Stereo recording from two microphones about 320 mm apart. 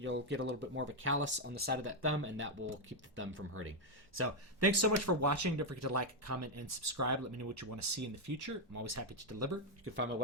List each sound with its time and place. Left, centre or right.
0.0 s speech: right